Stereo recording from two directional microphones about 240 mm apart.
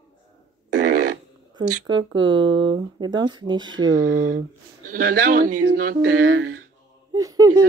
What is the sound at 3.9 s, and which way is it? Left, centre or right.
Speech, right.